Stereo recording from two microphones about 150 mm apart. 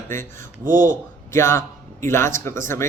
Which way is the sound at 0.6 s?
65° right (ahead or behind).